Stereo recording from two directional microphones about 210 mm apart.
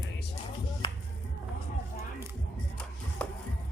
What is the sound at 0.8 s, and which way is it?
Music, 25° left (ahead or behind).